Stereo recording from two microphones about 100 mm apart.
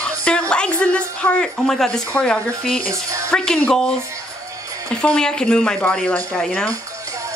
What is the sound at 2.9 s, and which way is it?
Speech, 30° right (ahead or behind).